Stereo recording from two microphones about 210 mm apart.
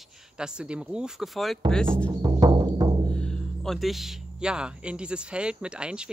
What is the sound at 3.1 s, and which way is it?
Speech, 5° left (ahead or behind).